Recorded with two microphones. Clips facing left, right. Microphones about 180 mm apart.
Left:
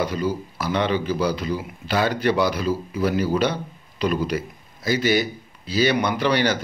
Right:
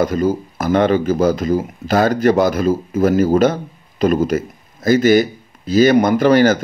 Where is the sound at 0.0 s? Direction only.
45° right (ahead or behind).